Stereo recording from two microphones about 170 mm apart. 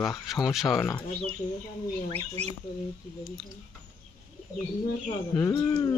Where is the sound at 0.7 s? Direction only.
15° left (ahead or behind).